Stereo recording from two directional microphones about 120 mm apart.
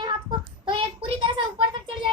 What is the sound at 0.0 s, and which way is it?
Child singing, 40° right (ahead or behind).